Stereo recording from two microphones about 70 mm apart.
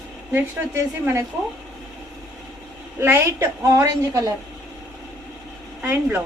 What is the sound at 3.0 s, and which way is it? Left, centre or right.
A woman's voice, right.